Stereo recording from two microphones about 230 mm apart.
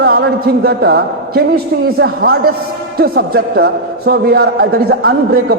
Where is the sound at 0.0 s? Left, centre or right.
Right.